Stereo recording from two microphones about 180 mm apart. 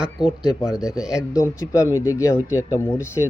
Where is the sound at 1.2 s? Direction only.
20° left (ahead or behind).